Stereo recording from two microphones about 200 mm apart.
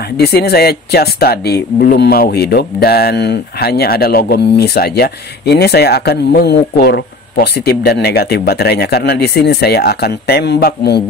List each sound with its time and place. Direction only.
0.2 s speech: 55° left (ahead or behind)